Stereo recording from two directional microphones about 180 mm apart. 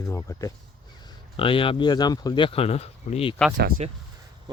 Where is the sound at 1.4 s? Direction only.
30° left (ahead or behind).